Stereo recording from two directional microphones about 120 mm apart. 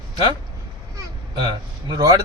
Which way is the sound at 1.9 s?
35° right (ahead or behind).